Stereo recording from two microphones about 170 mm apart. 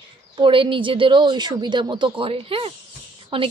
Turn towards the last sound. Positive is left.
turn(degrees=-30)  # may be behind; listen again after turning